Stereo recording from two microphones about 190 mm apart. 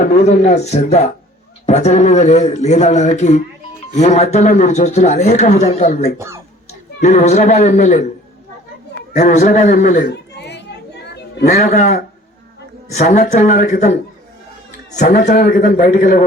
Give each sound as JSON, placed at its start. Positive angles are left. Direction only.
{"t": 0.1, "sound": "a man's voice", "side_deg": 35}
{"t": 6.1, "sound": "speech", "side_deg": -15}
{"t": 7.0, "sound": "a man's voice", "side_deg": 40}
{"t": 9.1, "sound": "a man's voice", "side_deg": 40}
{"t": 10.1, "sound": "chatter", "side_deg": 65}
{"t": 11.4, "sound": "a man's voice", "side_deg": 35}
{"t": 14.9, "sound": "a man's voice", "side_deg": 40}